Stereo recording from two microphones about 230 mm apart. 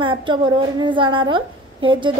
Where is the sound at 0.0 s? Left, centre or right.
Right.